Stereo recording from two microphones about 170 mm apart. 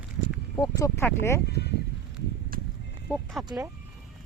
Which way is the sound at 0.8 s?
15° left (ahead or behind).